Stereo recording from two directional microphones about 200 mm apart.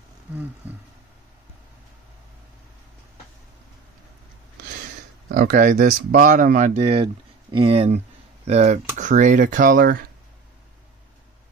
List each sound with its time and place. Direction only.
0.6 s speech: 10° right (ahead or behind)
5.3 s speech: 45° right (ahead or behind)